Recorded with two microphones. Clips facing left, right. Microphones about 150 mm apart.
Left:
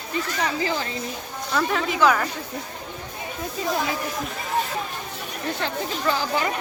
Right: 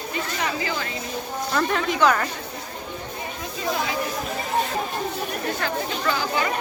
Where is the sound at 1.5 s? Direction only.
5° left (ahead or behind).